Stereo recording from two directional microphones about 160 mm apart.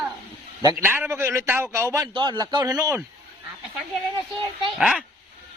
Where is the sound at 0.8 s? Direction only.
15° right (ahead or behind).